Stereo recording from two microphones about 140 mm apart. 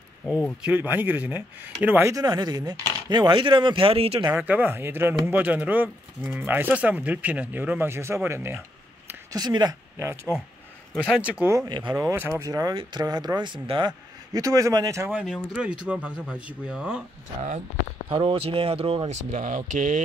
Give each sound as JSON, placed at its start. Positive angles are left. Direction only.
{"t": 0.2, "sound": "speech", "side_deg": 5}
{"t": 0.7, "sound": "speech", "side_deg": -15}
{"t": 4.3, "sound": "speech", "side_deg": -15}
{"t": 9.3, "sound": "speech", "side_deg": -30}
{"t": 11.1, "sound": "speech", "side_deg": -10}
{"t": 11.5, "sound": "speech", "side_deg": -30}
{"t": 12.1, "sound": "speech", "side_deg": -20}
{"t": 15.1, "sound": "speech", "side_deg": -5}
{"t": 18.1, "sound": "speech", "side_deg": -40}
{"t": 19.3, "sound": "speech", "side_deg": -65}